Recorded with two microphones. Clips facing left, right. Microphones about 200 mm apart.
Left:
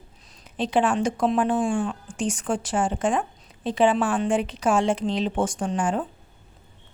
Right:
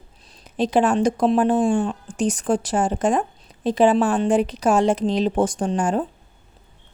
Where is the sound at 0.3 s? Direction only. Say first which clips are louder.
Right 5 dB; 35° right (ahead or behind).